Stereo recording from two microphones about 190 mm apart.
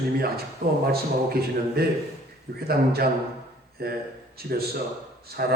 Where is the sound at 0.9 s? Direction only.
55° right (ahead or behind).